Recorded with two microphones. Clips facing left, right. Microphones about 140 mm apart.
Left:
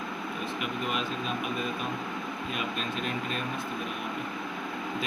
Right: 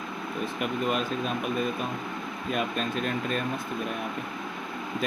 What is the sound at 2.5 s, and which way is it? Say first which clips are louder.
Speech: right 7 dB; 40° right (ahead or behind).